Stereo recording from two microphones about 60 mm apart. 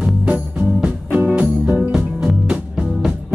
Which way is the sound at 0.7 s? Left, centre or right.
Centre.